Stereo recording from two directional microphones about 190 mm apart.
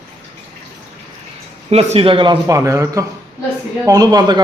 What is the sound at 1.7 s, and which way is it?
A man's voice, 35° right (ahead or behind).